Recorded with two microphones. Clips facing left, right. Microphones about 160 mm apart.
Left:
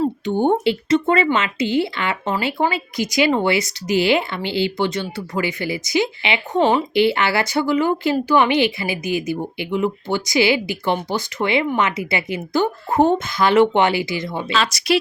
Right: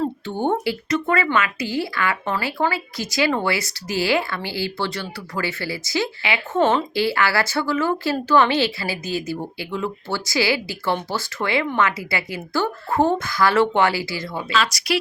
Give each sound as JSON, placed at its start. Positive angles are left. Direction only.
{"t": 0.0, "sound": "a woman's voice", "side_deg": 15}